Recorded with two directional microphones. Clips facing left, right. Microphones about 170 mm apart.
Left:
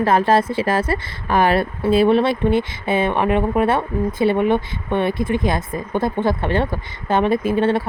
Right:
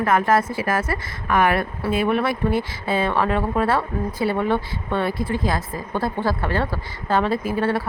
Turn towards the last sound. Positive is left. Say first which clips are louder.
# left 4 dB
turn(degrees=25)  # may be behind; listen again after turning